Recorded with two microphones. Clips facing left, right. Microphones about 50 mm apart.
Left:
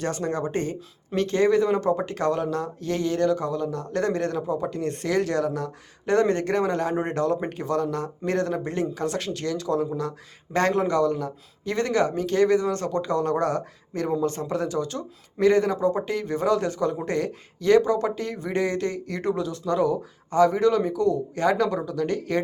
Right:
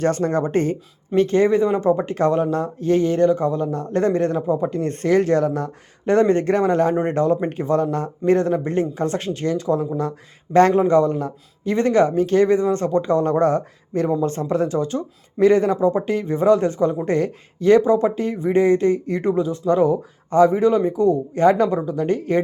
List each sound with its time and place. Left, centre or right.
0.0 s speech: right
7.1 s speech: right